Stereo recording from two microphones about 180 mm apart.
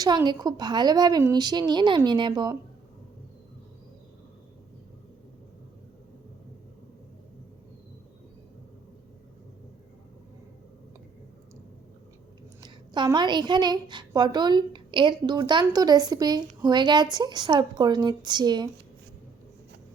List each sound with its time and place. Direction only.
0.0 s a woman's voice: 20° right (ahead or behind)
12.6 s a woman's voice: 25° right (ahead or behind)